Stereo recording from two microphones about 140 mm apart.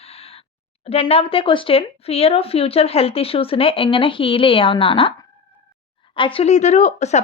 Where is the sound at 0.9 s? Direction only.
45° left (ahead or behind).